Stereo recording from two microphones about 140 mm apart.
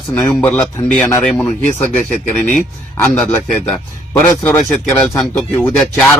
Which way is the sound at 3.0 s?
10° left (ahead or behind).